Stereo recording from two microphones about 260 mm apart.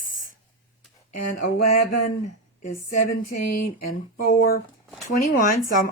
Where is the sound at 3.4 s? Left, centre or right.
Left.